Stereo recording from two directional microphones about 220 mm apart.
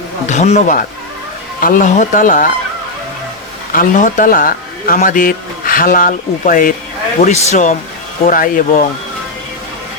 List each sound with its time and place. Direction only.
0.3 s a man's voice: 30° left (ahead or behind)
3.7 s a man's voice: 40° left (ahead or behind)